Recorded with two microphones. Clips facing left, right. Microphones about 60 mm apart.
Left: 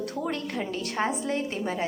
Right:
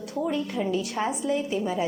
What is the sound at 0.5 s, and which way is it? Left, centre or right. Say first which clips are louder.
A woman's voice: right 3 dB; left.